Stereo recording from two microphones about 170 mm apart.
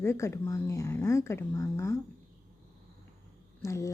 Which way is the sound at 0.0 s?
15° left (ahead or behind).